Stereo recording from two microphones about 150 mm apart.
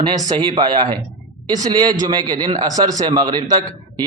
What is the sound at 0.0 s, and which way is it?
A man's voice, 30° right (ahead or behind).